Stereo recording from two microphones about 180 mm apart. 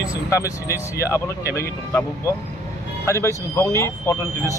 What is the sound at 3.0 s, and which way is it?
Speech, 15° left (ahead or behind).